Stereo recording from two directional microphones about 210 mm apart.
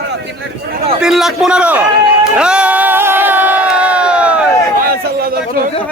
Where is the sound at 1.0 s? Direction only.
Centre (ahead or behind).